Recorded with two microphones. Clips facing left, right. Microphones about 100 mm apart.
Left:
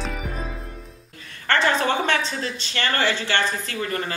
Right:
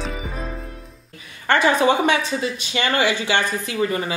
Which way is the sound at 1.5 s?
15° right (ahead or behind).